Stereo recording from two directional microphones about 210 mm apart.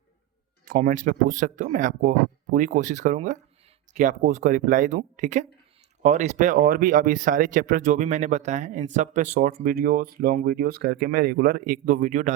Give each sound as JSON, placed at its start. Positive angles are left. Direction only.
{"t": 0.6, "sound": "speech", "side_deg": -40}